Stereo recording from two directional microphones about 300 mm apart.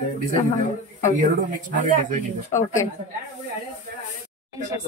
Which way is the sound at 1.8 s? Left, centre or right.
Right.